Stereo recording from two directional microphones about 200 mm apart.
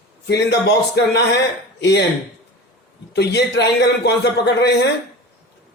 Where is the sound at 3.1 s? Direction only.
60° left (ahead or behind).